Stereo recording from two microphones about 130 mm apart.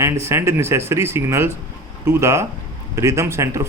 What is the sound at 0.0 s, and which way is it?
Speech, 20° right (ahead or behind).